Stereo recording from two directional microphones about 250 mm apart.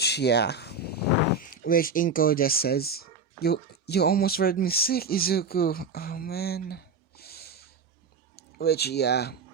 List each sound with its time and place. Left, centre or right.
0.0 s speech: left